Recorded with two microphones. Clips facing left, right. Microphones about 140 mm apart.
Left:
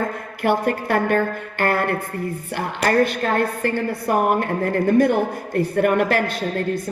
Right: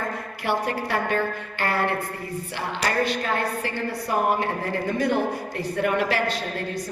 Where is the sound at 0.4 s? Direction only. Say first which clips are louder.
Left 6 dB; 50° left (ahead or behind).